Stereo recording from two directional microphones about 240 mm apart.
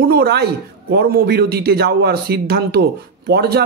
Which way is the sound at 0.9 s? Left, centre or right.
Right.